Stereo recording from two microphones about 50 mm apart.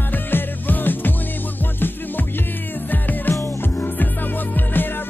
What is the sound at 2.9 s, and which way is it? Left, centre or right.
Music, left.